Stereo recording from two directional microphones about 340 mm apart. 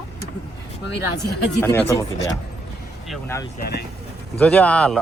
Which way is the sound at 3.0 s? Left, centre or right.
Centre.